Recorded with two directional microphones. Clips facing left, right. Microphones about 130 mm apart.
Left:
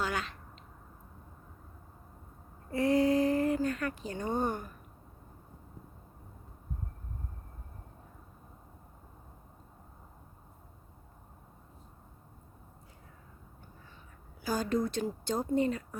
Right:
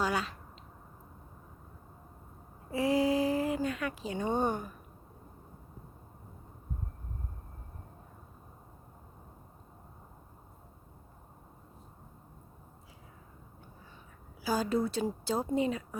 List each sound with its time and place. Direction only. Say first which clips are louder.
0.0 s speech: right 3 dB; 10° right (ahead or behind)
2.6 s a sound: left 1 dB; 5° right (ahead or behind)
4.1 s a woman's voice: right 3 dB; 10° right (ahead or behind)
14.4 s a woman's voice: right 1 dB; 5° right (ahead or behind)